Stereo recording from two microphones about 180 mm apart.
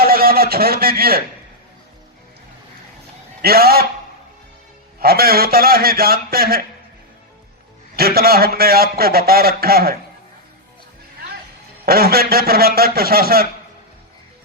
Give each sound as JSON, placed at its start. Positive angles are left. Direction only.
{"t": 0.0, "sound": "a sound", "side_deg": -55}
{"t": 3.4, "sound": "a man's voice", "side_deg": -60}
{"t": 4.9, "sound": "a man's voice", "side_deg": -55}
{"t": 7.9, "sound": "a man's voice", "side_deg": -55}
{"t": 11.9, "sound": "a man's voice", "side_deg": -55}